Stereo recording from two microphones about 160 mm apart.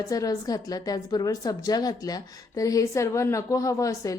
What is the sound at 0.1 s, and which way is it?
A woman's voice, 20° left (ahead or behind).